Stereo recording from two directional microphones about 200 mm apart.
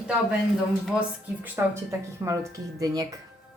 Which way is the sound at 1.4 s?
10° right (ahead or behind).